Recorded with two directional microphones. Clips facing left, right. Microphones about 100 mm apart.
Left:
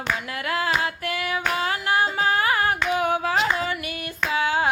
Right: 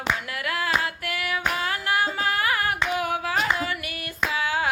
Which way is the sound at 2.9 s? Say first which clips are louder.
Left 3 dB; 25° left (ahead or behind).